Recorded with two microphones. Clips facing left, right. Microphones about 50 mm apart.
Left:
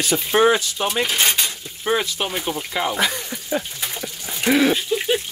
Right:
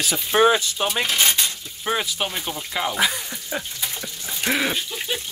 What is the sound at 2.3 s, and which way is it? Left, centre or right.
Speech, centre.